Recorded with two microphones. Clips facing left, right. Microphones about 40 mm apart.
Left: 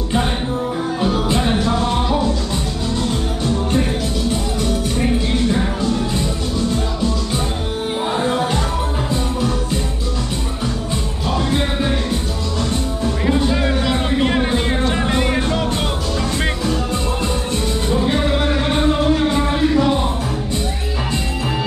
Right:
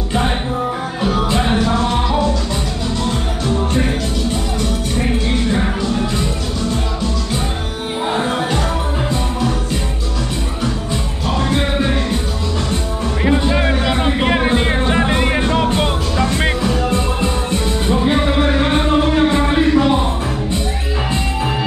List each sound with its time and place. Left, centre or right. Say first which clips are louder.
1.0 s music: right 2 dB; right
13.2 s music: right 3 dB; right